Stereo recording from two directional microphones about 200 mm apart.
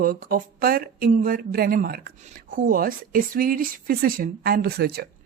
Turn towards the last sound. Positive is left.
turn(degrees=-50)  # may be behind; listen again after turning